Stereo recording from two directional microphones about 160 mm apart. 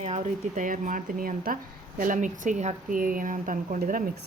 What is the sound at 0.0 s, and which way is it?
Speech, 45° right (ahead or behind).